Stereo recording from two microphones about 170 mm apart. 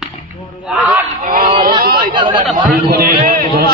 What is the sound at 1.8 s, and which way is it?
Chatter, 60° right (ahead or behind).